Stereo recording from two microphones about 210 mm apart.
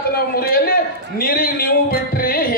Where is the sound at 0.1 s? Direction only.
45° left (ahead or behind).